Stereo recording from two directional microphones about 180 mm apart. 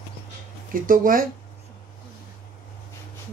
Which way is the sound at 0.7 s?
50° right (ahead or behind).